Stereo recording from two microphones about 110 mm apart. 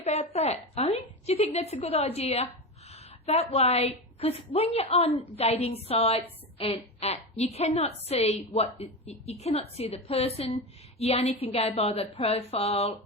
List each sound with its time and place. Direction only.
0.0 s a woman's voice: 75° left (ahead or behind)